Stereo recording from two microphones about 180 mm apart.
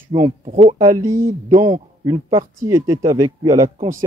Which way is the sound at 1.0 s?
50° right (ahead or behind).